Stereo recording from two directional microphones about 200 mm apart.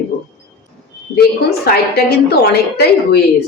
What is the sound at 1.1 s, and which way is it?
A woman's voice, 50° left (ahead or behind).